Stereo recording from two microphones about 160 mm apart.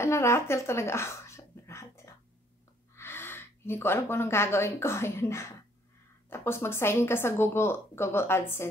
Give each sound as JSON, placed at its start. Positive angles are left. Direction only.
{"t": 0.0, "sound": "a woman's voice", "side_deg": 15}